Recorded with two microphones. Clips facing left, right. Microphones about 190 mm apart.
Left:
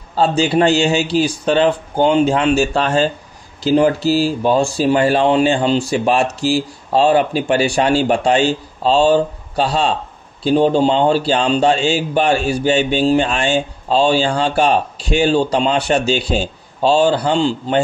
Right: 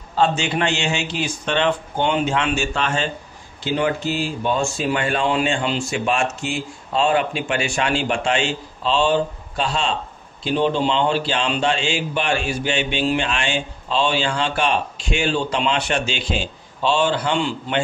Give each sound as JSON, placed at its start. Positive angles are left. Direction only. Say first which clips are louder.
{"t": 0.1, "sound": "speech", "louder": "left 5 dB", "side_deg": 35}